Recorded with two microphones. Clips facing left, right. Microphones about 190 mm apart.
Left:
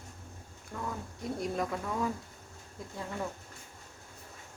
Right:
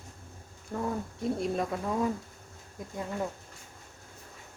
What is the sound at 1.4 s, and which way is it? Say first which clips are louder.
Speech: right 3 dB; 25° right (ahead or behind).